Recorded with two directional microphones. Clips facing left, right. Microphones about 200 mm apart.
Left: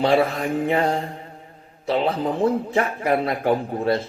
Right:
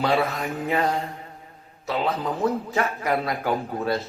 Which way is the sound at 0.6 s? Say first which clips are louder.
Left 2 dB; 25° left (ahead or behind).